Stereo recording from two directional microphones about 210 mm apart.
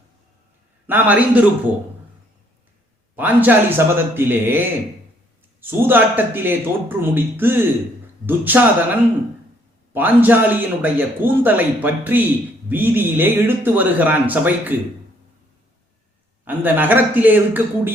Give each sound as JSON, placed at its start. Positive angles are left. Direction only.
{"t": 0.9, "sound": "speech", "side_deg": -10}
{"t": 3.2, "sound": "speech", "side_deg": -10}
{"t": 16.5, "sound": "speech", "side_deg": -10}